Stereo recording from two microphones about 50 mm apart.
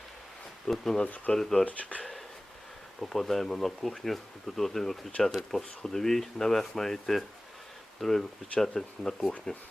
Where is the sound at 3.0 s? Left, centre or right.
Centre.